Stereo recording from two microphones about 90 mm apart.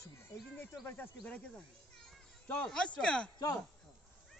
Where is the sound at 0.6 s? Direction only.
25° left (ahead or behind).